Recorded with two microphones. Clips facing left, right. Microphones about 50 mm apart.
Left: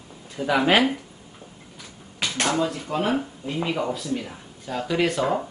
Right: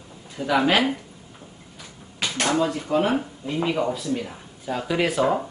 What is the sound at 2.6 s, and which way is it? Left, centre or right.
Speech, centre.